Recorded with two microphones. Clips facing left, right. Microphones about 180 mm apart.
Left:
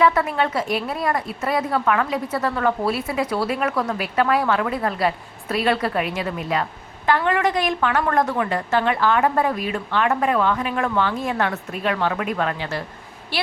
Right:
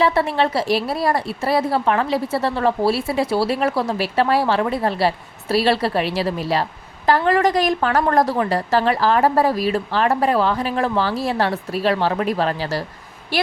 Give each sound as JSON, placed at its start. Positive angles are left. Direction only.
{"t": 0.0, "sound": "a woman's voice", "side_deg": -30}